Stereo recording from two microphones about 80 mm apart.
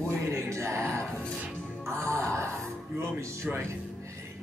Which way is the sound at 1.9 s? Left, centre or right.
Right.